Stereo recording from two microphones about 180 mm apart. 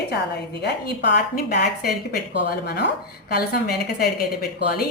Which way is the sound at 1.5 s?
60° left (ahead or behind).